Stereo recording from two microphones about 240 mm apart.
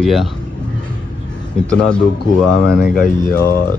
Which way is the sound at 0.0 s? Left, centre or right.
Centre.